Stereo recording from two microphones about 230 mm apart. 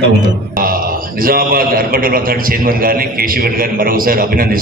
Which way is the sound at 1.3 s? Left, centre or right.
Right.